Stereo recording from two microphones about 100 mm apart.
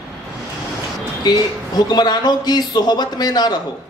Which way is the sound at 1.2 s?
40° left (ahead or behind).